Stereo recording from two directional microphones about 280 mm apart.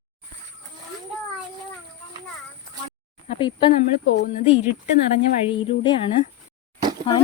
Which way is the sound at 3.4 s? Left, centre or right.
Centre.